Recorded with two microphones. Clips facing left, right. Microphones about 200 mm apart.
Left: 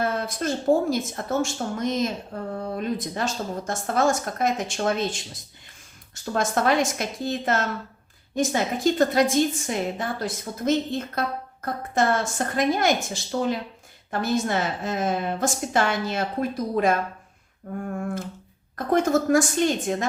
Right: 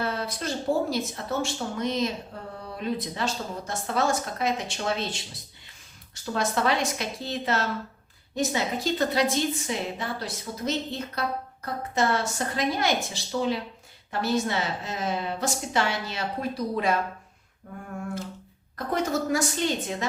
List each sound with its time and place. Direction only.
0.0 s a woman's voice: 50° left (ahead or behind)
6.3 s a woman's voice: 50° left (ahead or behind)